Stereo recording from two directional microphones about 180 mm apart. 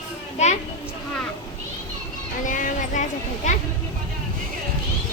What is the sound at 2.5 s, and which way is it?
Vehicle, 45° left (ahead or behind).